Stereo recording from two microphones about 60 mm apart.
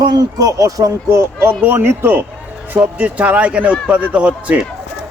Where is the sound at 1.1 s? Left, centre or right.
Right.